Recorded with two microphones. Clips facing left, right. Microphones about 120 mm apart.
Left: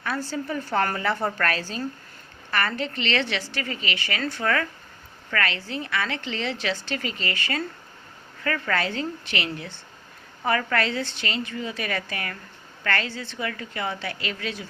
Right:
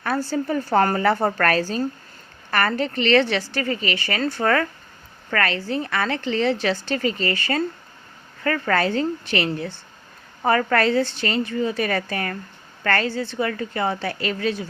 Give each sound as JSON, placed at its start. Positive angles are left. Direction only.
{"t": 0.0, "sound": "a woman's voice", "side_deg": -40}